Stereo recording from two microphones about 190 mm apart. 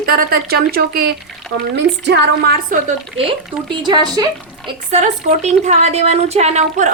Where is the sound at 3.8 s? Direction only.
20° right (ahead or behind).